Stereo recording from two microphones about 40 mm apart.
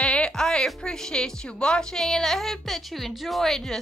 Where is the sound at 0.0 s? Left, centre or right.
Left.